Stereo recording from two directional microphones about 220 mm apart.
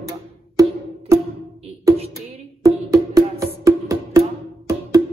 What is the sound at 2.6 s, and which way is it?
Music, 15° right (ahead or behind).